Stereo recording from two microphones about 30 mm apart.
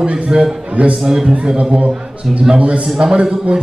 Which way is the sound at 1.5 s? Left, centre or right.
Right.